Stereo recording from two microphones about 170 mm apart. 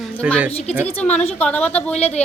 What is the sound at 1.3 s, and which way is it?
Speech, 5° left (ahead or behind).